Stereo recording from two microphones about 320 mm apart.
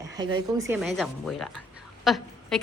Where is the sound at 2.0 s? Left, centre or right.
Centre.